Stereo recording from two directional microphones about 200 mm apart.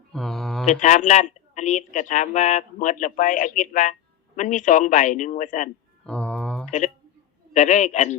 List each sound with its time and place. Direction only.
0.1 s mantra: centre (ahead or behind)
0.6 s speech: 40° left (ahead or behind)
6.1 s mantra: 5° left (ahead or behind)
6.7 s a sound: 40° left (ahead or behind)
7.5 s speech: 35° left (ahead or behind)